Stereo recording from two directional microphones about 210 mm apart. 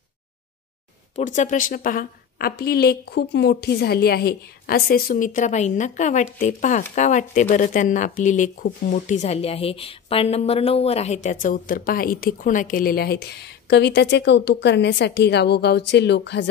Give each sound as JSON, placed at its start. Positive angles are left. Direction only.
{"t": 1.1, "sound": "a woman's voice", "side_deg": 35}
{"t": 11.2, "sound": "speech", "side_deg": 40}